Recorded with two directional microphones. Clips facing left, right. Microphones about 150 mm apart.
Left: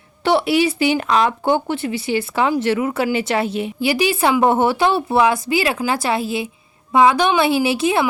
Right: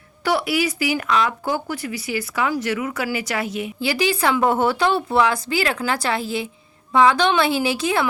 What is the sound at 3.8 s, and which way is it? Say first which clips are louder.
Speech: left 3 dB; 20° left (ahead or behind).